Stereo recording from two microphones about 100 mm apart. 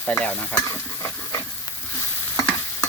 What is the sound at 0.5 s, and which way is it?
Stir, 30° left (ahead or behind).